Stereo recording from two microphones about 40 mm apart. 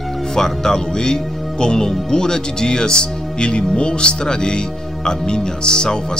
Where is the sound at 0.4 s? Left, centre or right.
Centre.